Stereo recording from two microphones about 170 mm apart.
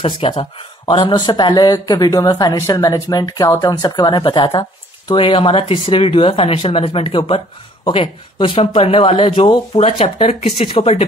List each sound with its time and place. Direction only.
0.0 s speech: 30° left (ahead or behind)